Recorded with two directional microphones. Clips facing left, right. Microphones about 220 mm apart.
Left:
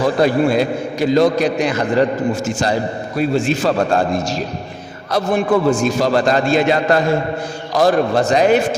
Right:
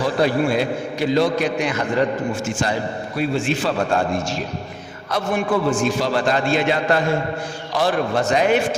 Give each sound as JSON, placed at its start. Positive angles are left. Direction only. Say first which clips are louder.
{"t": 0.0, "sound": "a man's voice", "louder": "left 4 dB", "side_deg": 45}